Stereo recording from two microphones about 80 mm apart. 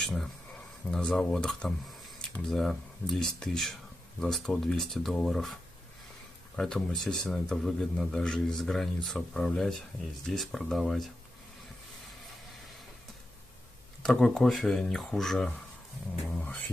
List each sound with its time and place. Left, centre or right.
0.0 s speech: centre
14.0 s speech: centre
16.3 s music: centre